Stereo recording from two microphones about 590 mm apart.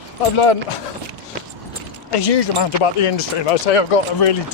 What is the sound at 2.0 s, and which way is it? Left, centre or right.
Speech, left.